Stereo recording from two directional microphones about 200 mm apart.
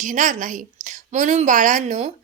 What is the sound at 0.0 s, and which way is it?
A woman's voice, 40° right (ahead or behind).